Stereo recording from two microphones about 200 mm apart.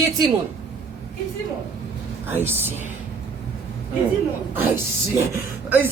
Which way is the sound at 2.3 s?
10° right (ahead or behind).